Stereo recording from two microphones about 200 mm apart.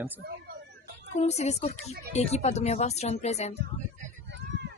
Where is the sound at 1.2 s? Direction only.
35° left (ahead or behind).